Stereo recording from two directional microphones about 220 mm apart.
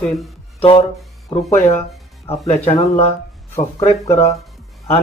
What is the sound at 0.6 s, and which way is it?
Speech, 25° left (ahead or behind).